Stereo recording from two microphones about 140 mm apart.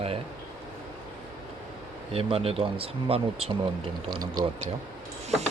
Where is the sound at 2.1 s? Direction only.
40° right (ahead or behind).